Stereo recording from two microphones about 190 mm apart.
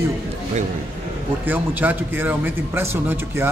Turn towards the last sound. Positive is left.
turn(degrees=-15)  # may be behind; listen again after turning